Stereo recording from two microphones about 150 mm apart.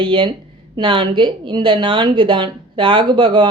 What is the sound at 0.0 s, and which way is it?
Speech, 30° right (ahead or behind).